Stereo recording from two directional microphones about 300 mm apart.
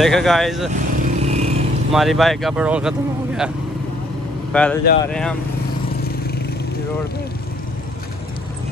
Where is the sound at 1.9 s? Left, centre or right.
Centre.